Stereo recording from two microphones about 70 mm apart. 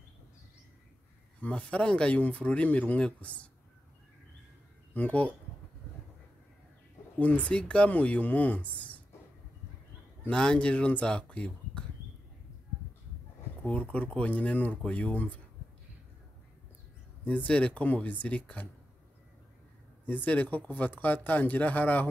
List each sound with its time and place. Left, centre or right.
1.4 s speech: centre
4.9 s speech: left
7.2 s speech: left
10.3 s speech: centre
13.7 s speech: centre
17.2 s speech: centre
20.1 s speech: left